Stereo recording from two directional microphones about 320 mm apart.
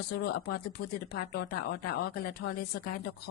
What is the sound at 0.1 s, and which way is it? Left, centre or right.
A woman's voice, left.